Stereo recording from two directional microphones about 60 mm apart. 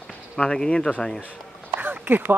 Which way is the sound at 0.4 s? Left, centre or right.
Centre.